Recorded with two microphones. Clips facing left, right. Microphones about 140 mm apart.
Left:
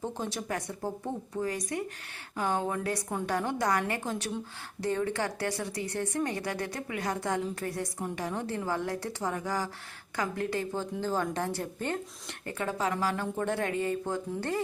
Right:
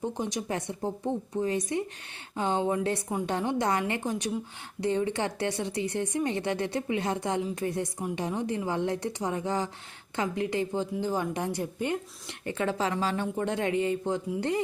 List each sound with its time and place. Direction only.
0.0 s a woman's voice: 15° right (ahead or behind)